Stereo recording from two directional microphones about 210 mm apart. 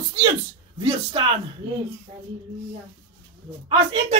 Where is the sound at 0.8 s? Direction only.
20° right (ahead or behind).